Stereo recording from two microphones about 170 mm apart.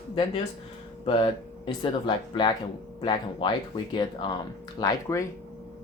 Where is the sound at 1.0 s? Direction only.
30° left (ahead or behind).